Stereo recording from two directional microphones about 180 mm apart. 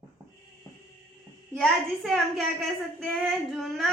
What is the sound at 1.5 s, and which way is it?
Speech, centre (ahead or behind).